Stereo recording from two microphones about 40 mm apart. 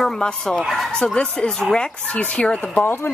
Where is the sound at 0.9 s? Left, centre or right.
Left.